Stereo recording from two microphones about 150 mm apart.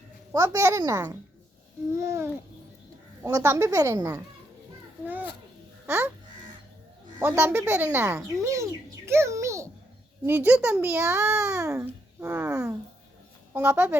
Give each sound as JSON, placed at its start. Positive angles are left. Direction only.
{"t": 0.3, "sound": "a woman's voice", "side_deg": -20}
{"t": 7.2, "sound": "a child's voice", "side_deg": -15}